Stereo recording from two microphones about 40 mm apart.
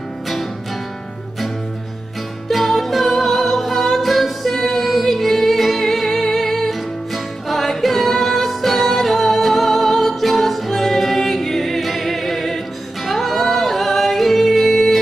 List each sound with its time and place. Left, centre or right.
2.4 s music: centre
13.0 s yodeling: centre